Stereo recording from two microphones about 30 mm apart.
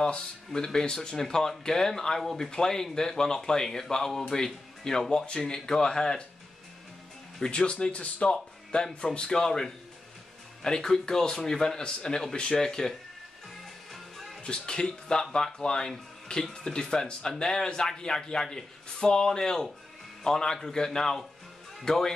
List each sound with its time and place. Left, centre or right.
0.7 s speech: left
5.2 s speech: left
7.5 s speech: left
8.2 s speech: left
14.1 s music: centre
14.4 s speech: left
16.3 s speech: left
16.6 s speech: left